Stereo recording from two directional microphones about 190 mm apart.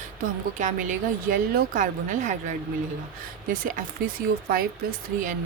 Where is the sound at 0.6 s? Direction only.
45° right (ahead or behind).